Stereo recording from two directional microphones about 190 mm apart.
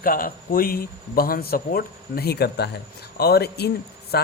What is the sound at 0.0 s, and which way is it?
Speech, 50° left (ahead or behind).